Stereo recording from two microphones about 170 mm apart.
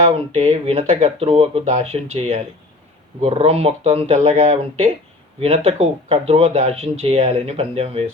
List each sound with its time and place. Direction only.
0.1 s speech: 35° right (ahead or behind)